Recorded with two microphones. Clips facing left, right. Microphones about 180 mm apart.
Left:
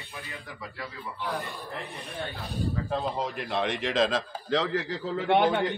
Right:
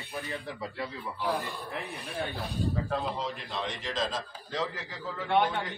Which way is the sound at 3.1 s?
60° left (ahead or behind).